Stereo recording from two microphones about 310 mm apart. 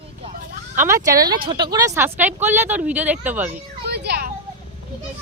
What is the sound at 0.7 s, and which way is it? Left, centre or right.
Speech, centre.